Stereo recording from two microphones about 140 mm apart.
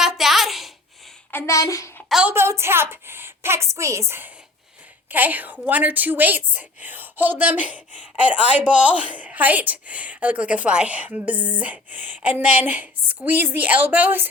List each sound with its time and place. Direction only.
0.0 s a sound: centre (ahead or behind)
1.3 s a woman's voice: 20° left (ahead or behind)
2.0 s a woman's voice: 5° right (ahead or behind)
2.3 s a woman's voice: 20° right (ahead or behind)